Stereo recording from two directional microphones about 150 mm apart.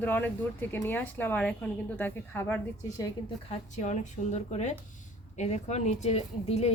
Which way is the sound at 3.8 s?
55° left (ahead or behind).